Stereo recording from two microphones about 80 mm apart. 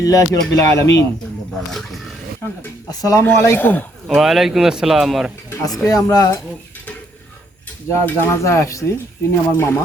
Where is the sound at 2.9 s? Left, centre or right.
Left.